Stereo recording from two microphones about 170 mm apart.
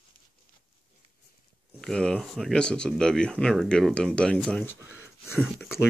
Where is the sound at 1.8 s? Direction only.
5° left (ahead or behind).